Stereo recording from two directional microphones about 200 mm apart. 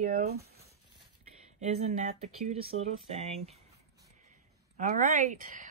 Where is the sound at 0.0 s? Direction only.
50° right (ahead or behind).